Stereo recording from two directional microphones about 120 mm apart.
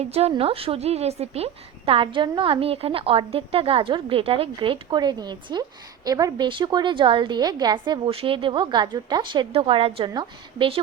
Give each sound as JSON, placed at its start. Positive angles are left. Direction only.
{"t": 0.0, "sound": "a woman's voice", "side_deg": -60}